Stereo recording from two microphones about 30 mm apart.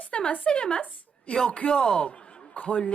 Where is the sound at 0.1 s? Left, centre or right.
Left.